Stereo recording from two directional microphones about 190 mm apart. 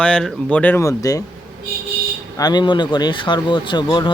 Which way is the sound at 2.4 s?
20° left (ahead or behind).